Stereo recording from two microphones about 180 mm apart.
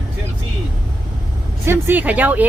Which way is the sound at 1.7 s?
10° right (ahead or behind).